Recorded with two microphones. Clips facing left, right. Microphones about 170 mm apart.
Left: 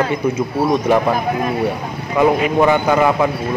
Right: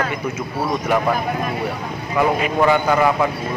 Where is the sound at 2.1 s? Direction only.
20° left (ahead or behind).